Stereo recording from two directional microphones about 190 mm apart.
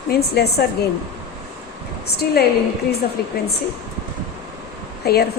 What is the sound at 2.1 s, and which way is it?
A woman's voice, 55° left (ahead or behind).